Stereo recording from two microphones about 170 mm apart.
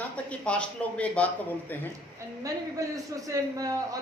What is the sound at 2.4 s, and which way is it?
A man's voice, 20° right (ahead or behind).